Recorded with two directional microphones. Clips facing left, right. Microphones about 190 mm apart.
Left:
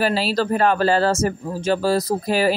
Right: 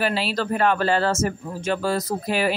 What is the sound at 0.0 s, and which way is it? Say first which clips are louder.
Speech: left 4 dB; 40° left (ahead or behind).